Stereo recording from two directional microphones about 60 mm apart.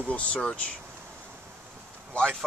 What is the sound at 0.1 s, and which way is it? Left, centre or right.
Speech, centre.